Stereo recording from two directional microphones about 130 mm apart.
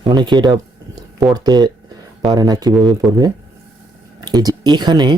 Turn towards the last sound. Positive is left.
turn(degrees=-35)  # may be behind; listen again after turning